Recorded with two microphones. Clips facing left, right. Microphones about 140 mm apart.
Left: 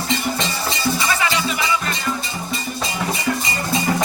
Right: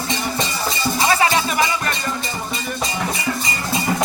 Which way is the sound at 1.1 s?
45° right (ahead or behind).